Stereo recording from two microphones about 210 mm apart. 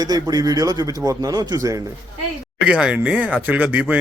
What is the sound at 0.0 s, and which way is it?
Speech, 20° right (ahead or behind).